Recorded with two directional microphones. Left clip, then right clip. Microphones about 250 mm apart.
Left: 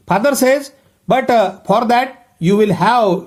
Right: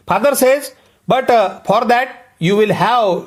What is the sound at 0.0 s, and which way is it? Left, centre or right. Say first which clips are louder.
Speech: right 1 dB; centre.